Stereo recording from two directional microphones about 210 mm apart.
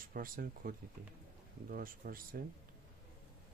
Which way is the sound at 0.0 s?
45° right (ahead or behind).